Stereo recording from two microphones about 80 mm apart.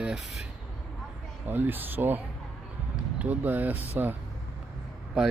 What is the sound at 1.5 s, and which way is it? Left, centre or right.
Speech, right.